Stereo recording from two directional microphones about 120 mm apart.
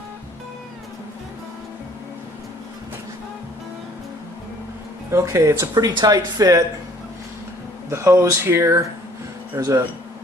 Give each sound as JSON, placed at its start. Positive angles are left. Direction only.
{"t": 5.1, "sound": "speech", "side_deg": -25}
{"t": 7.9, "sound": "speech", "side_deg": -20}